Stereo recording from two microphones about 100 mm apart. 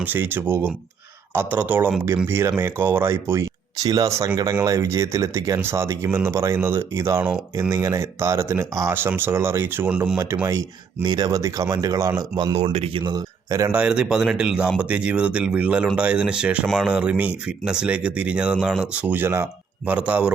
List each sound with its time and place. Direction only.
0.0 s speech: 20° right (ahead or behind)
11.0 s speech: 40° right (ahead or behind)
12.5 s speech: 75° right (ahead or behind); by 13.7 s 35° right (ahead or behind)
13.7 s speech: 10° right (ahead or behind)